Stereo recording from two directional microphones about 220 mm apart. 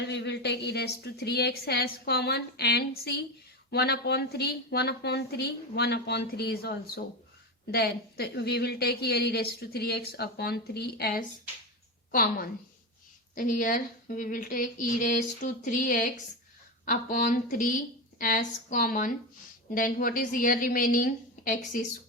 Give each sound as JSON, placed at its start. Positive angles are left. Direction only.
{"t": 0.1, "sound": "a woman's voice", "side_deg": 50}